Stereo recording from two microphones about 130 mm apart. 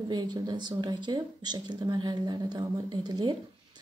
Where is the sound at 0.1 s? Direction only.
35° right (ahead or behind).